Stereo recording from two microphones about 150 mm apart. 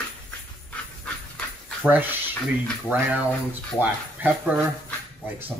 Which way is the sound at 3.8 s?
10° right (ahead or behind).